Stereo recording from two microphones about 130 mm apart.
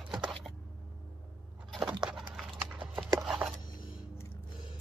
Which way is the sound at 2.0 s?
5° right (ahead or behind).